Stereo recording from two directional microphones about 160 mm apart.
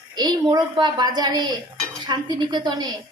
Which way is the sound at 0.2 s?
25° right (ahead or behind).